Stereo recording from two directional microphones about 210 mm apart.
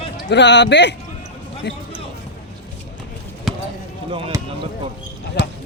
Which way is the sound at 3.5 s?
Centre (ahead or behind).